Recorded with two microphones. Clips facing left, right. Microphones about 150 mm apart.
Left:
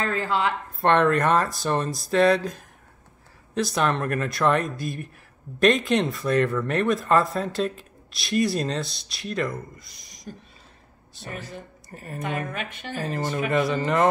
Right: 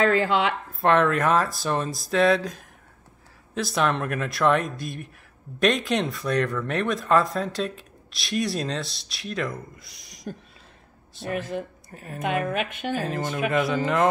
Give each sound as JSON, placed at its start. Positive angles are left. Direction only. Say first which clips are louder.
{"t": 0.0, "sound": "speech", "louder": "right 4 dB", "side_deg": -80}
{"t": 0.7, "sound": "speech", "louder": "left 1 dB", "side_deg": 0}
{"t": 11.2, "sound": "speech", "louder": "right 8 dB", "side_deg": -70}
{"t": 11.9, "sound": "speech", "louder": "left 1 dB", "side_deg": 0}
{"t": 12.4, "sound": "speech", "louder": "right 6 dB", "side_deg": -80}
{"t": 13.0, "sound": "speech", "louder": "left 4 dB", "side_deg": 0}